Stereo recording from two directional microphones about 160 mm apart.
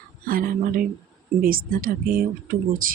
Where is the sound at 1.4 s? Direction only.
65° right (ahead or behind).